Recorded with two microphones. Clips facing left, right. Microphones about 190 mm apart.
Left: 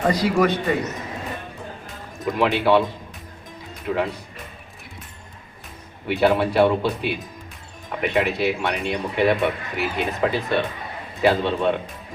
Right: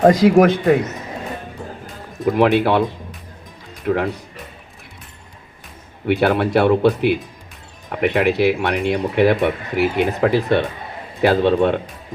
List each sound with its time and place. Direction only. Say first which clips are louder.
0.0 s speech: right 8 dB; 50° right (ahead or behind)
2.2 s speech: right 5 dB; 55° right (ahead or behind)
3.8 s speech: right 4 dB; 60° right (ahead or behind)
6.1 s speech: right 2 dB; 60° right (ahead or behind)